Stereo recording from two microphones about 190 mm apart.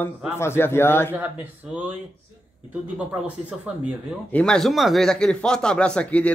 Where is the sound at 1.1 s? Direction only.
10° right (ahead or behind).